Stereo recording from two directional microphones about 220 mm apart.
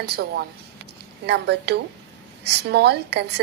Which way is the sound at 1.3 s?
50° right (ahead or behind).